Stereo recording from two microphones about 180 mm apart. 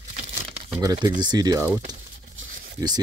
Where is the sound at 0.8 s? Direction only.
20° right (ahead or behind).